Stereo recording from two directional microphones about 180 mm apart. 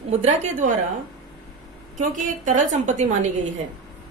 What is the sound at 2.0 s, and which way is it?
A woman's voice, 45° right (ahead or behind).